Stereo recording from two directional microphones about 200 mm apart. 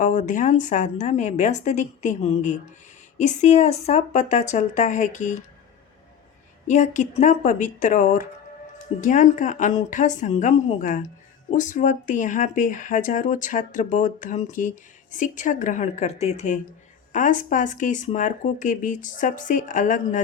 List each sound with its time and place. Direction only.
0.0 s speech: 40° left (ahead or behind)
6.7 s speech: 35° left (ahead or behind)